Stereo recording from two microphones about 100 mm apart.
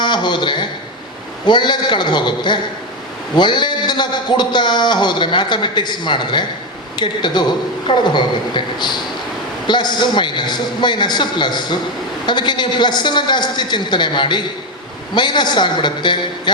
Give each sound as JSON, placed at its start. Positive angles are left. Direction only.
{"t": 0.0, "sound": "a man's voice", "side_deg": 50}